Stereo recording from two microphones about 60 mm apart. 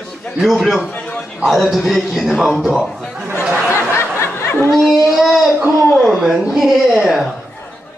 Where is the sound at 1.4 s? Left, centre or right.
Centre.